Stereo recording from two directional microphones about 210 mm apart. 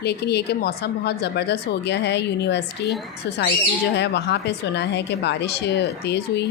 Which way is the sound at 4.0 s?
55° left (ahead or behind).